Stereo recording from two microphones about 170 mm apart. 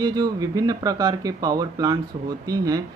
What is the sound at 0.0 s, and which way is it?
Speech, 20° right (ahead or behind).